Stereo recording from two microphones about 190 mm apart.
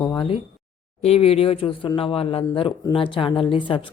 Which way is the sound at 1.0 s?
30° left (ahead or behind).